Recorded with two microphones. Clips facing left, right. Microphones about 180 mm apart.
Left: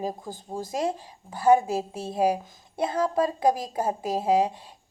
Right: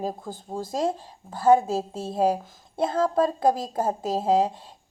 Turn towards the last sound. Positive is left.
turn(degrees=10)  # may be behind; listen again after turning